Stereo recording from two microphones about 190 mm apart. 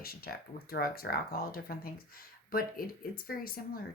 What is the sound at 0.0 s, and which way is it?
Speech, 50° left (ahead or behind).